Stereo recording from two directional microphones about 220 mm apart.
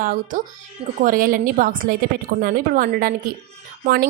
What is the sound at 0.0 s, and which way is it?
A woman's voice, 35° right (ahead or behind).